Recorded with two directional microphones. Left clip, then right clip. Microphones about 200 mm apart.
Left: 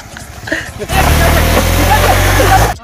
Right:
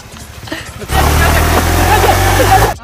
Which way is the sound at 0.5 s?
5° right (ahead or behind).